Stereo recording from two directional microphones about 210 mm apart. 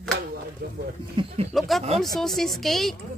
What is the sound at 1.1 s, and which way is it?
Speech, 25° right (ahead or behind).